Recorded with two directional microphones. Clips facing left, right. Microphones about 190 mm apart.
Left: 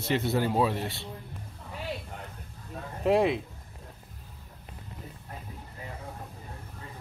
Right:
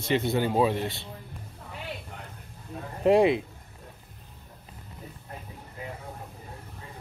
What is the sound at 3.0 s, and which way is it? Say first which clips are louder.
Speech: right 4 dB; centre (ahead or behind).